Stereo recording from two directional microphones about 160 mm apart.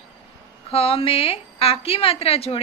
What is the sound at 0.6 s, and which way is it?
A woman's voice, 40° left (ahead or behind).